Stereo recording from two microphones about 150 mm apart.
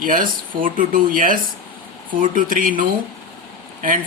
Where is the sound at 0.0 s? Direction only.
65° right (ahead or behind).